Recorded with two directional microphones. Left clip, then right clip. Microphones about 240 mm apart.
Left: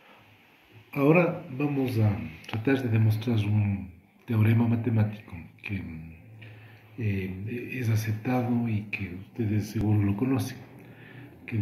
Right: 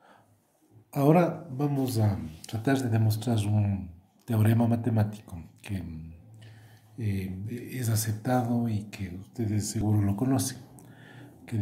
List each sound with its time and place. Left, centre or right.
0.9 s speech: right
7.0 s speech: right